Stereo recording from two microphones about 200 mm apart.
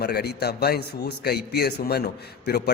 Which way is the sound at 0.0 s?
55° left (ahead or behind).